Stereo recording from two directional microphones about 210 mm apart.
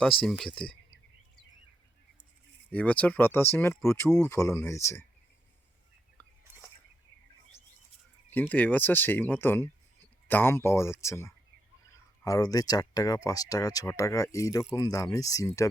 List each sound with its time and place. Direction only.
0.0 s speech: centre (ahead or behind)
2.7 s speech: 5° left (ahead or behind)
8.3 s speech: 10° left (ahead or behind)